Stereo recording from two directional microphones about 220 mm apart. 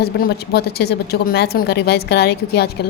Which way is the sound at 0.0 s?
45° left (ahead or behind).